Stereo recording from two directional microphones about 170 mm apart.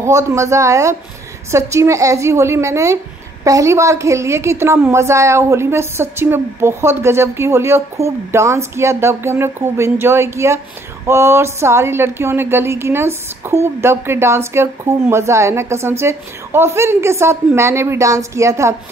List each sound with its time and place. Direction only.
0.0 s a woman's voice: 15° right (ahead or behind)